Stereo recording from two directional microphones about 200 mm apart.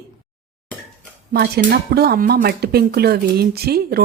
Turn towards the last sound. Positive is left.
turn(degrees=-50)  # may be behind; listen again after turning